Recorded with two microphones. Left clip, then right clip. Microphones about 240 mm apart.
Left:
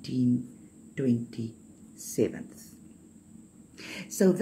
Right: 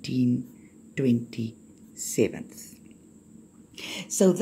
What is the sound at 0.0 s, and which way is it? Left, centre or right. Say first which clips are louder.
Speech: right 2 dB; right.